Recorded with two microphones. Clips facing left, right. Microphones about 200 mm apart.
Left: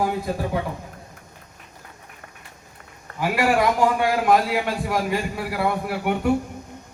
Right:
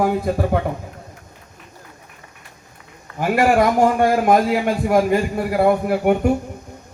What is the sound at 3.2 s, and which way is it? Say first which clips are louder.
A man's voice: right 5 dB; 50° right (ahead or behind).